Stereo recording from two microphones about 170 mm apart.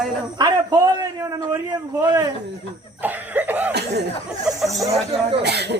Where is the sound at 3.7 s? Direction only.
75° right (ahead or behind).